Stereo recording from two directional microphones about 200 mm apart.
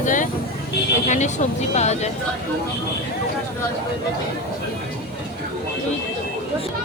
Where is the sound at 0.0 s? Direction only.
40° left (ahead or behind).